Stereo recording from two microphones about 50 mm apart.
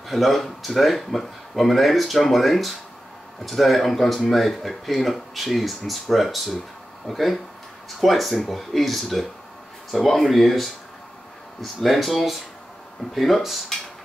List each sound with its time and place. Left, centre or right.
0.1 s speech: centre